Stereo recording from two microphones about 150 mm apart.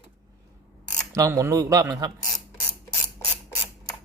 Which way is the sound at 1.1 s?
20° right (ahead or behind).